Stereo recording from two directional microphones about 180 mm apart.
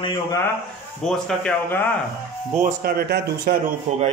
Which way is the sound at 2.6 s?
50° right (ahead or behind).